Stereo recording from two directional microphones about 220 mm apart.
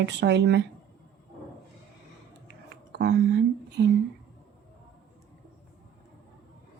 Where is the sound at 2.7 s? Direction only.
50° right (ahead or behind).